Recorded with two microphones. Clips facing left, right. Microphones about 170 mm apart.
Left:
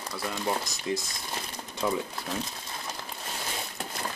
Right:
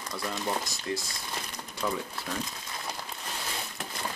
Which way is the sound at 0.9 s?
15° left (ahead or behind).